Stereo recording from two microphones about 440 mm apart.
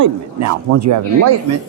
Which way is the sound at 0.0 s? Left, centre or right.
Right.